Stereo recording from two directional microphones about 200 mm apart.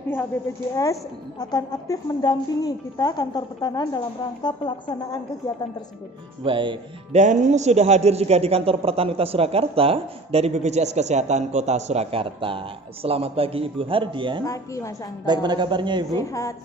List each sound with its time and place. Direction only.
1.4 s a woman's voice: 20° left (ahead or behind)
6.4 s a man's voice: 25° right (ahead or behind)
7.2 s a man's voice: 35° right (ahead or behind)
14.4 s speech: 15° left (ahead or behind)
15.2 s a man's voice: 20° right (ahead or behind)
16.1 s speech: 15° left (ahead or behind)